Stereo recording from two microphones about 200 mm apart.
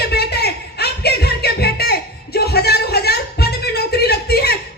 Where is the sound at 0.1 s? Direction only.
55° left (ahead or behind).